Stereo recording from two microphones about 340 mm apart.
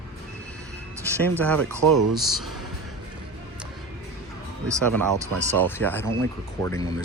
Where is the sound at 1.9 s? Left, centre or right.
Right.